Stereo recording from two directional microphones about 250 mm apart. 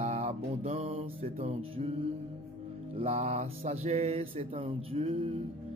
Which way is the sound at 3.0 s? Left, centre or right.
Right.